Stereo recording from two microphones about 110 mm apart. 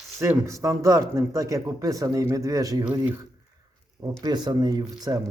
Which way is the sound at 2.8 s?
20° right (ahead or behind).